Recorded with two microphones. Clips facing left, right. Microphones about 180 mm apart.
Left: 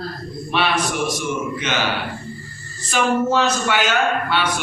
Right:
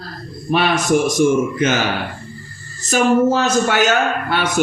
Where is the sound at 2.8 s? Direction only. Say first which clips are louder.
Right 5 dB; 45° right (ahead or behind).